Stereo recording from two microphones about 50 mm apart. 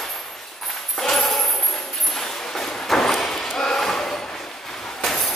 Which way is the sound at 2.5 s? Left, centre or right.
Centre.